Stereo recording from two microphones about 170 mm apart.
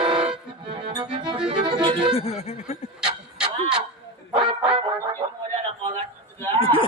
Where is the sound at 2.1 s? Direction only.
35° left (ahead or behind).